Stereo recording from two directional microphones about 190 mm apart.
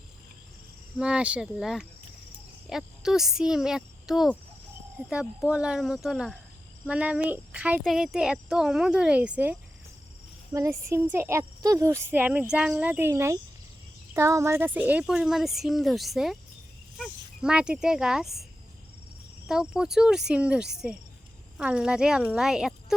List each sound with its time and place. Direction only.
0.9 s a child's voice: 5° right (ahead or behind)
19.5 s a child's voice: 5° right (ahead or behind)